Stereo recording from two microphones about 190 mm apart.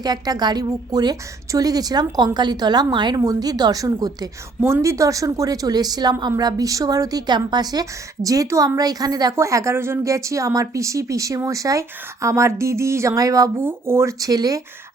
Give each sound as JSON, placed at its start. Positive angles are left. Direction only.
{"t": 0.0, "sound": "a woman's voice", "side_deg": -20}